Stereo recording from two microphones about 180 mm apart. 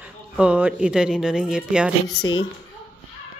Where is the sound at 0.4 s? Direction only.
5° right (ahead or behind).